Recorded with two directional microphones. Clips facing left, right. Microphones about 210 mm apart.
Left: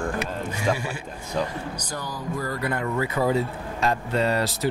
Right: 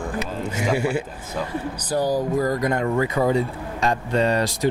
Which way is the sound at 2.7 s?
20° right (ahead or behind).